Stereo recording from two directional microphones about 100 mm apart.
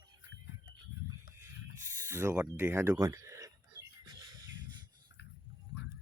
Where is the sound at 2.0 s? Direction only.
25° right (ahead or behind).